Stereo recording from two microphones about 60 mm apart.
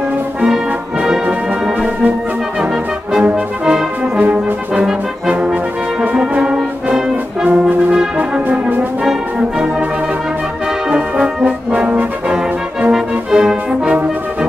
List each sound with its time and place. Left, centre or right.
2.6 s brass instrument: centre
4.2 s brass instrument: right
8.2 s brass instrument: right
10.9 s brass instrument: centre
12.9 s music: centre